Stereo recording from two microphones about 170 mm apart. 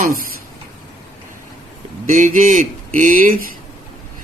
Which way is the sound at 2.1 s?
50° right (ahead or behind).